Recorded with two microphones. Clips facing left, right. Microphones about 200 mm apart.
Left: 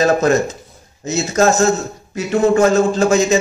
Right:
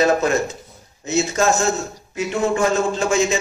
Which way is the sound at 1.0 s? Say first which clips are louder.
Left 3 dB; 40° left (ahead or behind).